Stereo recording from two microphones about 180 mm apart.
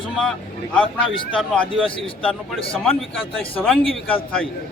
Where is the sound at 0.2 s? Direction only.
5° left (ahead or behind).